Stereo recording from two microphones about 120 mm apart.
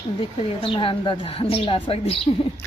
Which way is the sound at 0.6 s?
45° left (ahead or behind).